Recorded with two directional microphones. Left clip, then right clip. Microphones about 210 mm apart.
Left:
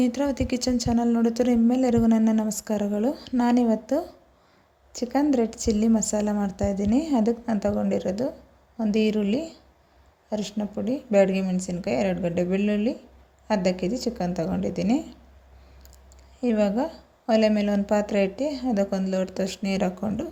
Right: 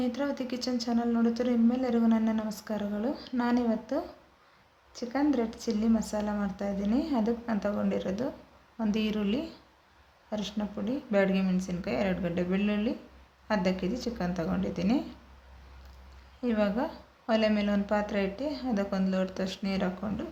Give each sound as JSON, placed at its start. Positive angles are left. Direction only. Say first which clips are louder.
{"t": 0.0, "sound": "a woman's voice", "louder": "left 7 dB", "side_deg": 35}
{"t": 16.4, "sound": "a woman's voice", "louder": "left 5 dB", "side_deg": 30}